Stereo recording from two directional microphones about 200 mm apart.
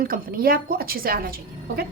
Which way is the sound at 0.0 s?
45° right (ahead or behind).